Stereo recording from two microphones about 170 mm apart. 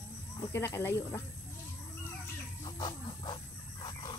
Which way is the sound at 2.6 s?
25° left (ahead or behind).